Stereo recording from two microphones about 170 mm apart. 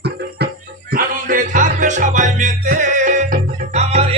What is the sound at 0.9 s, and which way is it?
Music, 55° right (ahead or behind).